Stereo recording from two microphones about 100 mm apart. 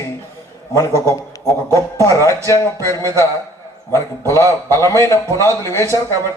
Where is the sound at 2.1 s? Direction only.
30° left (ahead or behind).